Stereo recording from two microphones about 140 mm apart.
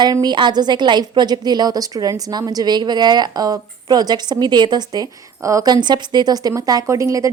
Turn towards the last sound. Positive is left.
turn(degrees=-25)  # may be behind; listen again after turning